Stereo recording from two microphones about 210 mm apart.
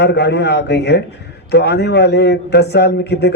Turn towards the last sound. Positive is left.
turn(degrees=55)  # may be behind; listen again after turning